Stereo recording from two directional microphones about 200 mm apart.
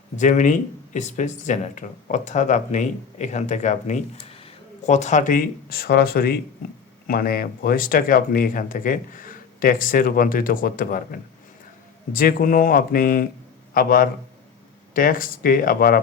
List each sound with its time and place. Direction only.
0.2 s speech: 40° left (ahead or behind)